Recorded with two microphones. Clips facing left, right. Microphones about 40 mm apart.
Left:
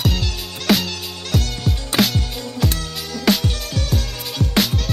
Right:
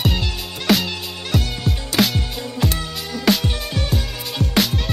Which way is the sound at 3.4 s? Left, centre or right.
Centre.